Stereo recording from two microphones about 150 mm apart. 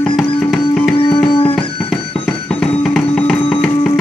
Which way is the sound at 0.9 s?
40° left (ahead or behind).